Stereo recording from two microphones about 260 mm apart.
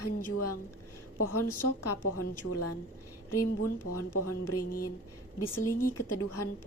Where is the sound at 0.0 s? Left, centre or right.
Left.